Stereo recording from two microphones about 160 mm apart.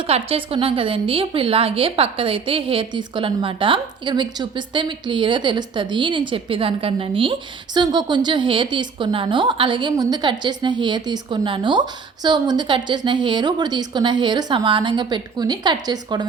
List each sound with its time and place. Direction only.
0.1 s a woman's voice: 35° right (ahead or behind)